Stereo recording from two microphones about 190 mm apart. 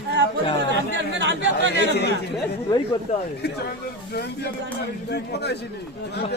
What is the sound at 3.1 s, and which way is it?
Speech, 40° left (ahead or behind).